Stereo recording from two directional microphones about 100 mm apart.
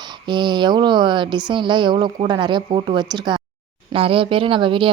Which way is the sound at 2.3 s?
50° right (ahead or behind).